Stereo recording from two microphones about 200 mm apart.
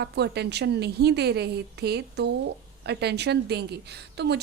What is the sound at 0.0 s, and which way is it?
A woman's voice, 55° right (ahead or behind).